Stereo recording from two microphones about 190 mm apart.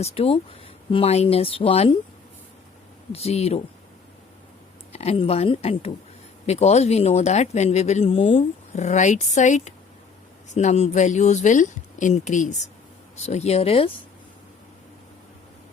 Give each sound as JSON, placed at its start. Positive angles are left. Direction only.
{"t": 0.0, "sound": "speech", "side_deg": 30}
{"t": 3.1, "sound": "speech", "side_deg": 35}
{"t": 4.9, "sound": "speech", "side_deg": 35}